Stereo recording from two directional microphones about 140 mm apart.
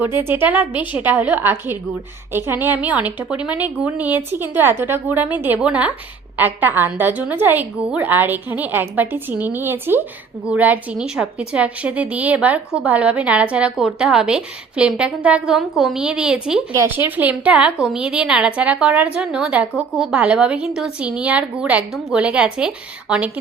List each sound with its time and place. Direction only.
0.0 s a woman's voice: 15° right (ahead or behind)
16.7 s a woman's voice: 15° right (ahead or behind)